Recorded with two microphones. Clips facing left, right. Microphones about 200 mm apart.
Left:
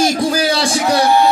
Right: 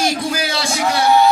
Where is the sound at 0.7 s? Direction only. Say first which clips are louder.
Even; centre (ahead or behind).